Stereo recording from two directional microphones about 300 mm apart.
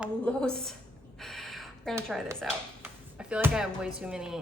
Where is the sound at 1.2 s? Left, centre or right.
Centre.